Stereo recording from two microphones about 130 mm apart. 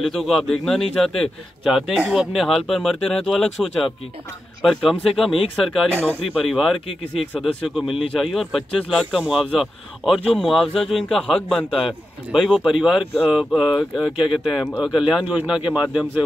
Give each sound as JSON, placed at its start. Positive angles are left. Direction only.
{"t": 0.0, "sound": "speech", "side_deg": 0}
{"t": 5.9, "sound": "a man's voice", "side_deg": -15}
{"t": 6.4, "sound": "a man's voice", "side_deg": 0}